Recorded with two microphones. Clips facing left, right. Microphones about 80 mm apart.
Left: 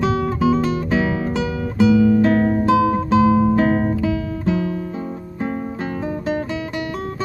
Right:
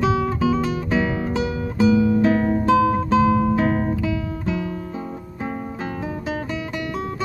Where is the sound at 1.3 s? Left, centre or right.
Left.